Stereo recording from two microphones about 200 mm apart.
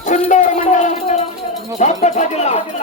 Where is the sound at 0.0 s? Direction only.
40° left (ahead or behind).